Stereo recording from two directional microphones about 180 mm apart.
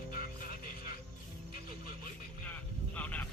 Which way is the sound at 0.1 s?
55° left (ahead or behind).